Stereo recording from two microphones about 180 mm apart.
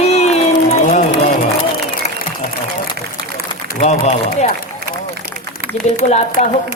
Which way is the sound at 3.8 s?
40° left (ahead or behind).